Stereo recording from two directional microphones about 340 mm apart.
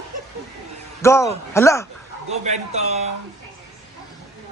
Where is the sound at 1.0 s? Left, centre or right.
Centre.